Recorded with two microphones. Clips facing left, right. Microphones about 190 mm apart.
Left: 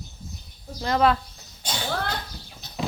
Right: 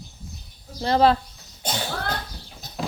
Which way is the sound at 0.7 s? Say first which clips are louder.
Right 3 dB; 30° right (ahead or behind).